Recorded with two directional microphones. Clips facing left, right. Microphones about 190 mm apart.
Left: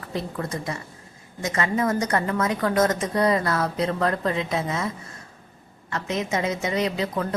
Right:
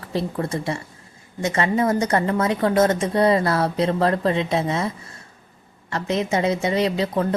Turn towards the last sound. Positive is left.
turn(degrees=-30)  # may be behind; listen again after turning